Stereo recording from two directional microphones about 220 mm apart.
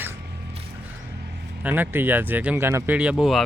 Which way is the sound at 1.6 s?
10° right (ahead or behind).